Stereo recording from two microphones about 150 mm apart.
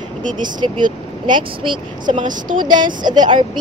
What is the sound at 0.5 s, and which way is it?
Speech, 30° right (ahead or behind).